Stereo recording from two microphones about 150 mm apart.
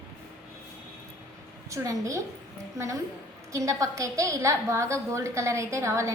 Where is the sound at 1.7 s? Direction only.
20° right (ahead or behind).